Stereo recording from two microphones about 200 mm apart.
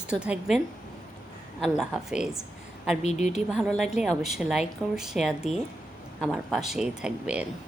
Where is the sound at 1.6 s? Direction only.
Centre (ahead or behind).